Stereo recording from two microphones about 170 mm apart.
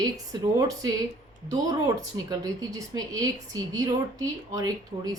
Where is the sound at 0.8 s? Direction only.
20° right (ahead or behind).